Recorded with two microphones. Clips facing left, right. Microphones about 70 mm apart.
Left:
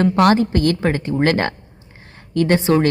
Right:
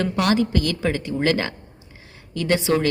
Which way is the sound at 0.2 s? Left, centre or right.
Left.